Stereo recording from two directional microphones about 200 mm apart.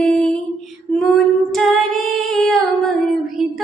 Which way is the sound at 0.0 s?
5° left (ahead or behind).